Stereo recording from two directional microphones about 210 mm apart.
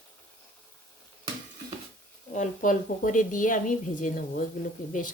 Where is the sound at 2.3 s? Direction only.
35° left (ahead or behind).